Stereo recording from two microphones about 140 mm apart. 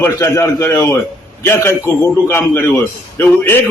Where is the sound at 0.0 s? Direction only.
20° left (ahead or behind).